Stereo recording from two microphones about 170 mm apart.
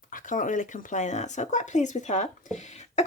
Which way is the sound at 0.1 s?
50° left (ahead or behind).